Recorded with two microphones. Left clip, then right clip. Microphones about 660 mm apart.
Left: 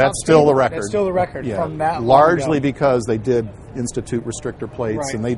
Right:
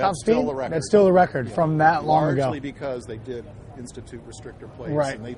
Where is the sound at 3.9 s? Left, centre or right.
Left.